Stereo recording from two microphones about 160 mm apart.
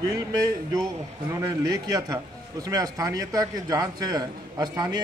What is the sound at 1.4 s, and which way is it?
A man's voice, 25° right (ahead or behind).